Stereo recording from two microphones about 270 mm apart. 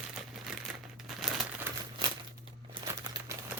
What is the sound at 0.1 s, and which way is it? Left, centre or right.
Crumpling, centre.